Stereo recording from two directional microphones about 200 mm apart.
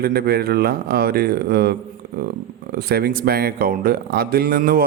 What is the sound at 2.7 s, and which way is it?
Speech, 50° right (ahead or behind).